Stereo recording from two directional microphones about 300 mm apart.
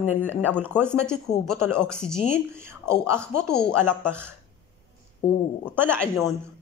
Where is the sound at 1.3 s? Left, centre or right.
Left.